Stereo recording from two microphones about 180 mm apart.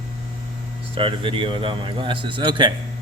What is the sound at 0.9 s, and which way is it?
Speech, 30° right (ahead or behind).